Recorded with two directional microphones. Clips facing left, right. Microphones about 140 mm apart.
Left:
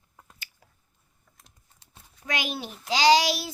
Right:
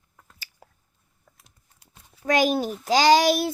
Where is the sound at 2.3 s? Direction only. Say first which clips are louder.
Right 11 dB; 40° right (ahead or behind).